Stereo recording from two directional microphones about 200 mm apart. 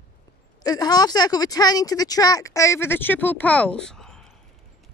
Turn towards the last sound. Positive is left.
turn(degrees=5)  # may be behind; listen again after turning